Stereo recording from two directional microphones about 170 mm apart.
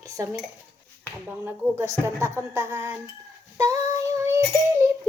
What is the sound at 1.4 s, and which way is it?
Speech, 15° right (ahead or behind).